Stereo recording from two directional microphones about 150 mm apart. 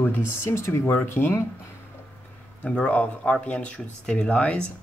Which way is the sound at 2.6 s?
10° left (ahead or behind).